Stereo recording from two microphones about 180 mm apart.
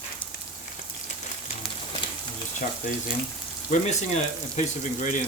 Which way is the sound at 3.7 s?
40° left (ahead or behind).